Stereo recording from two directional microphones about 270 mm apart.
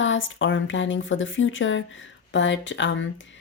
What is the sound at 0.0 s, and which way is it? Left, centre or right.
Speech, left.